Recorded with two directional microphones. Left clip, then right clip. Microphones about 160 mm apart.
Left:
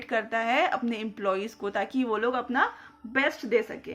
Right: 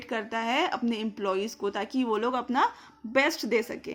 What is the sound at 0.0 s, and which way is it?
A woman's voice, 35° right (ahead or behind).